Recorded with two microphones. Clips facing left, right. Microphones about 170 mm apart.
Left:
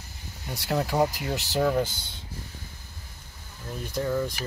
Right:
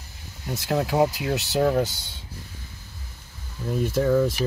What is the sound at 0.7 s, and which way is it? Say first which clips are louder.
Speech: right 3 dB; 10° right (ahead or behind).